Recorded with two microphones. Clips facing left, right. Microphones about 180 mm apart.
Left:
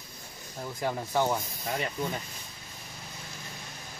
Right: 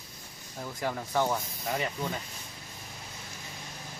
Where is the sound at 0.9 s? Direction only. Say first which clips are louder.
Left 1 dB; 15° left (ahead or behind).